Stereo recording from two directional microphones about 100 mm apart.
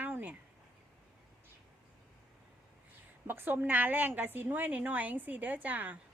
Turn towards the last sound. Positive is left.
turn(degrees=-15)  # may be behind; listen again after turning